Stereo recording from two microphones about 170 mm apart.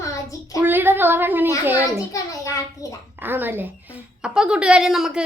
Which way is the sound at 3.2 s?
10° right (ahead or behind).